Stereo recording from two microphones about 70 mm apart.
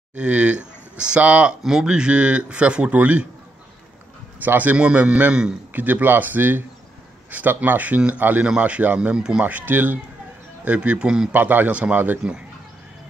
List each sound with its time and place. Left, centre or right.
0.1 s speech: centre
1.6 s a man's voice: centre
4.4 s a man's voice: right
5.7 s a man's voice: right
11.3 s a man's voice: right